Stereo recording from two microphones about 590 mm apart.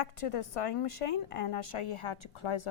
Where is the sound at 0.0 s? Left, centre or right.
Left.